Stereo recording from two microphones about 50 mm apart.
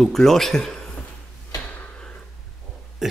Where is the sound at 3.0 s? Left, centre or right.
Centre.